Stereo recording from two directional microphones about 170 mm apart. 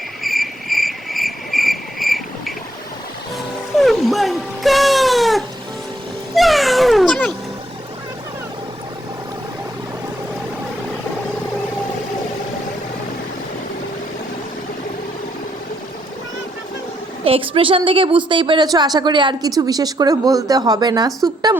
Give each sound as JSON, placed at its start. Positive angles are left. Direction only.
{"t": 0.2, "sound": "cricket", "side_deg": 0}
{"t": 3.8, "sound": "baby cry", "side_deg": 0}
{"t": 6.3, "sound": "cat", "side_deg": 0}
{"t": 17.2, "sound": "a woman's voice", "side_deg": -35}